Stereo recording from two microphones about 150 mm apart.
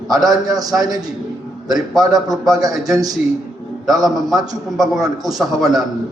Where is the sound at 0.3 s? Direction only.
25° right (ahead or behind).